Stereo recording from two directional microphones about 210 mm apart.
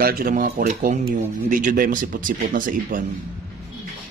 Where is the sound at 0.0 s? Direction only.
45° right (ahead or behind).